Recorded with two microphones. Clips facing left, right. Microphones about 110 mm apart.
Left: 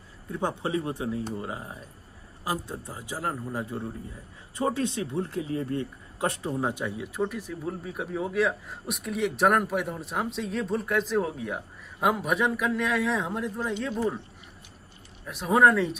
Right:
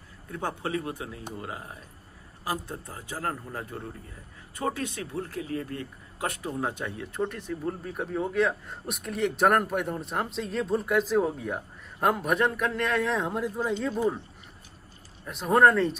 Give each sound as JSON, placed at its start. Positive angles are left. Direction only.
{"t": 0.3, "sound": "a man's voice", "side_deg": 20}
{"t": 6.5, "sound": "speech", "side_deg": 15}
{"t": 15.2, "sound": "speech", "side_deg": 0}